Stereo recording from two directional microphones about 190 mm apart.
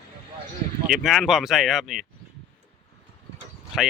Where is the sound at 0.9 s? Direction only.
5° right (ahead or behind).